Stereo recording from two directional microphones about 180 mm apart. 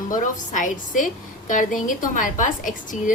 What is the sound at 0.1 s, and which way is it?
A woman's voice, 45° left (ahead or behind).